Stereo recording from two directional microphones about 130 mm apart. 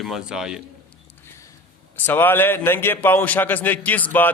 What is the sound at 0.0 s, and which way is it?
Speech, 5° right (ahead or behind).